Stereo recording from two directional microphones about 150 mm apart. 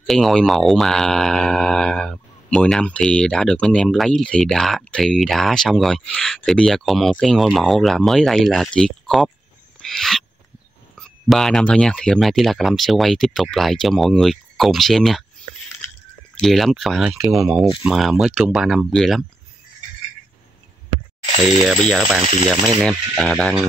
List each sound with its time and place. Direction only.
0.0 s speech: centre (ahead or behind)
9.8 s owl: centre (ahead or behind)
11.0 s speech: 5° left (ahead or behind)
16.3 s speech: centre (ahead or behind)
21.6 s speech: centre (ahead or behind)
22.2 s speech: 30° right (ahead or behind)
22.8 s speech: centre (ahead or behind)